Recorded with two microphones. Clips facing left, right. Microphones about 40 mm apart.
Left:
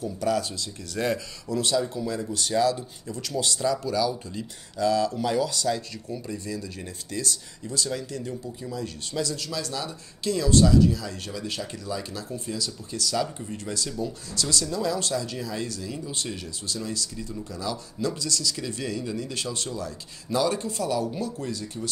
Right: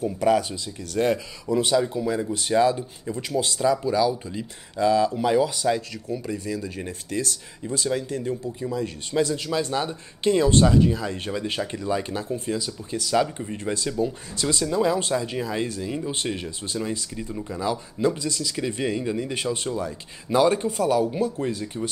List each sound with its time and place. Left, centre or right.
0.0 s speech: right
6.8 s speech: right